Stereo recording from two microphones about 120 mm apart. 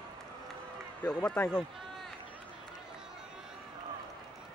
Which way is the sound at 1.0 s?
10° left (ahead or behind).